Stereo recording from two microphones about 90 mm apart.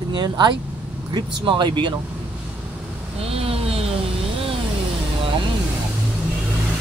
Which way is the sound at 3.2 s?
90° right.